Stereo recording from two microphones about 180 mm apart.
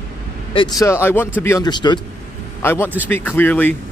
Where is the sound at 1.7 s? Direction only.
25° left (ahead or behind).